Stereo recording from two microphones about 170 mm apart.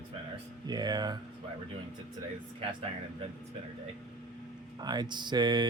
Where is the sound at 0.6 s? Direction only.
25° right (ahead or behind).